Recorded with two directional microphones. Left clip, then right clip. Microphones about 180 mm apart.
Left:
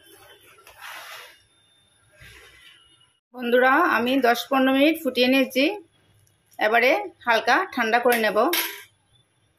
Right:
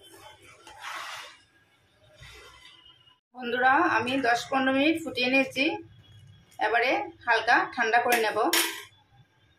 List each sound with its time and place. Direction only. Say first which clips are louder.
3.3 s speech: left 5 dB; 40° left (ahead or behind)